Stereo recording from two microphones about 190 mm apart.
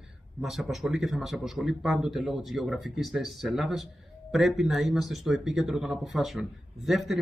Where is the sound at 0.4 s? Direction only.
Centre (ahead or behind).